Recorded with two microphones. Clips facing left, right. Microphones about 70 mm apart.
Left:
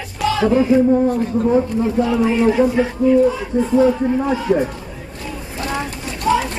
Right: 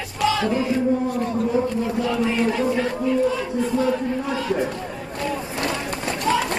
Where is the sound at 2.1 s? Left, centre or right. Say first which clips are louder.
Left 5 dB; centre.